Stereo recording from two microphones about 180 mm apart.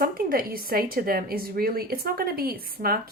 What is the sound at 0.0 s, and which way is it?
A woman's voice, 55° right (ahead or behind).